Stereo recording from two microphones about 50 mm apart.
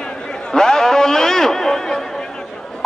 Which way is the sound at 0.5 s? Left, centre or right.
Centre.